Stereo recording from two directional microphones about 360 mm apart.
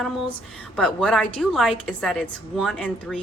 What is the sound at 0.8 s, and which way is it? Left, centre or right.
Speech, centre.